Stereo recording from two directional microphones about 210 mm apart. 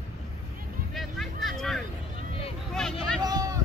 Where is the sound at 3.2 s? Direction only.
20° right (ahead or behind).